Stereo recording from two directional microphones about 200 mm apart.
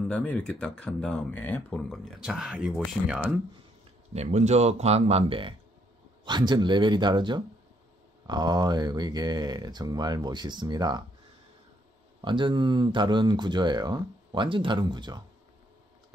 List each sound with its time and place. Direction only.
0.0 s speech: 5° left (ahead or behind)
4.1 s speech: 35° right (ahead or behind)
12.2 s speech: 25° right (ahead or behind)